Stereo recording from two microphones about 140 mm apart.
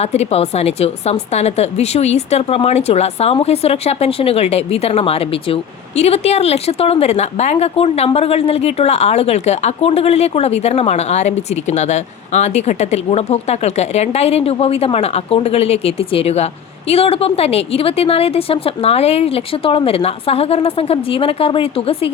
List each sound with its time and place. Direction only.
0.0 s a woman's voice: 50° left (ahead or behind)